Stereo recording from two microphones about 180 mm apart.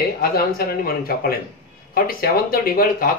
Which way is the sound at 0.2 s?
55° left (ahead or behind).